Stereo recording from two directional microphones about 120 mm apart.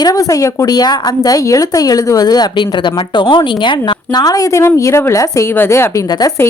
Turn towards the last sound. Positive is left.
turn(degrees=30)  # may be behind; listen again after turning